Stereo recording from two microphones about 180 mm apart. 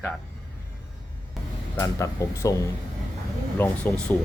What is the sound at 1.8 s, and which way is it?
Speech, 15° left (ahead or behind).